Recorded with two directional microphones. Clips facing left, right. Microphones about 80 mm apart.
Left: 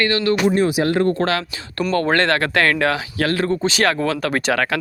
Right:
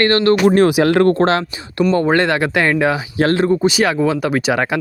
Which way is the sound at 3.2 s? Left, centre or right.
Right.